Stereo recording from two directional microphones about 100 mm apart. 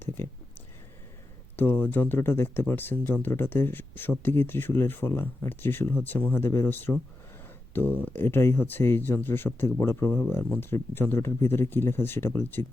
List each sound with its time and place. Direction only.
1.5 s speech: 20° left (ahead or behind)